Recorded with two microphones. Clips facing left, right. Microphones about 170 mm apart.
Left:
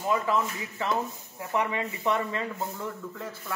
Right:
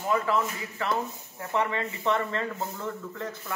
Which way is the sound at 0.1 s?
15° left (ahead or behind).